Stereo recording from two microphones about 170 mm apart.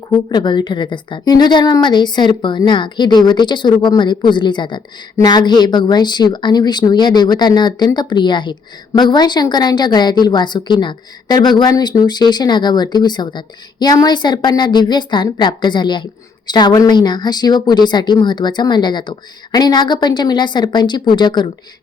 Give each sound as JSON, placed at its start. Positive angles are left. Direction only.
{"t": 0.3, "sound": "speech", "side_deg": 25}